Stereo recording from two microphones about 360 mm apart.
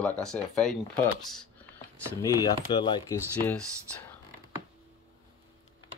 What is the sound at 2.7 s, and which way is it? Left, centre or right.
Speech, centre.